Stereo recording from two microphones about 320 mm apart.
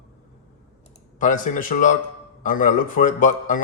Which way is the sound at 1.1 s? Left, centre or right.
Left.